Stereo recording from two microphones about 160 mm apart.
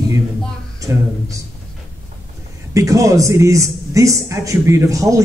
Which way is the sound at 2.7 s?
20° right (ahead or behind).